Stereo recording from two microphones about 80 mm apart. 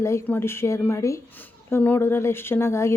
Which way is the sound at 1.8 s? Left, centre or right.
Left.